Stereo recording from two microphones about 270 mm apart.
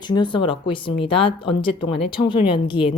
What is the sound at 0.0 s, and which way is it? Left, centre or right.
A woman's voice, centre.